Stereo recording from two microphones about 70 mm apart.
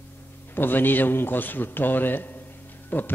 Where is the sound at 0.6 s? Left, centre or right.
Left.